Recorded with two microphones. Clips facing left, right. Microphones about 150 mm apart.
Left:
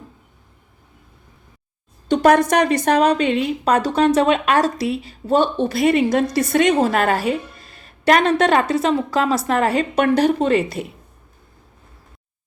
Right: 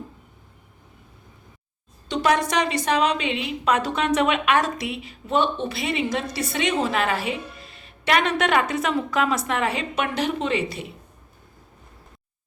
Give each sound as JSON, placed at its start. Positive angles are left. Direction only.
{"t": 2.0, "sound": "a woman's voice", "side_deg": 50}